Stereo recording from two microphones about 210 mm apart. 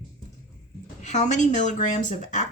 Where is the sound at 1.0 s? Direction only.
35° left (ahead or behind).